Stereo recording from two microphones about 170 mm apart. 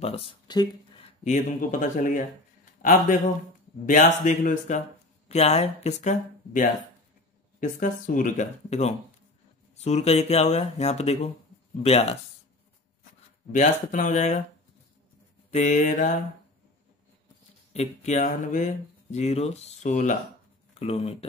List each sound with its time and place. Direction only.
0.0 s speech: 35° left (ahead or behind)
1.2 s a man's voice: 50° left (ahead or behind)
13.5 s speech: 45° left (ahead or behind)
15.5 s speech: 45° left (ahead or behind)
17.7 s speech: 45° left (ahead or behind)
20.7 s speech: 35° left (ahead or behind)